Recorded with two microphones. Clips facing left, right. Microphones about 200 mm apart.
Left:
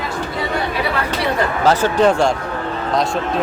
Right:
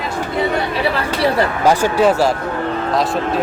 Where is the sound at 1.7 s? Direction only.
10° right (ahead or behind).